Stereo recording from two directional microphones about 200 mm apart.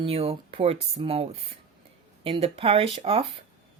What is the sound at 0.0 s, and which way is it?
Speech, 30° right (ahead or behind).